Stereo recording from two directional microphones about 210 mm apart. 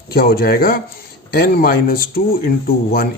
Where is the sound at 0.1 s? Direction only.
45° left (ahead or behind).